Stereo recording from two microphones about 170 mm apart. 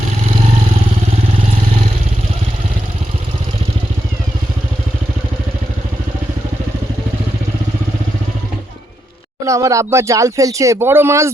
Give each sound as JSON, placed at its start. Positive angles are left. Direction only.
{"t": 9.5, "sound": "speech", "side_deg": -20}